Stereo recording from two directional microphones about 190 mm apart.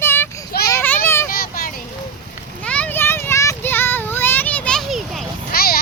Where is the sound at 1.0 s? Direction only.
15° left (ahead or behind).